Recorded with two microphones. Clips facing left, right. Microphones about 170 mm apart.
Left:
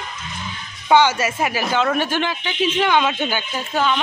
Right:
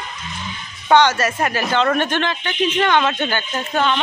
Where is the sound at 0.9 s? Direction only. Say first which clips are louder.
Right 1 dB; 10° left (ahead or behind).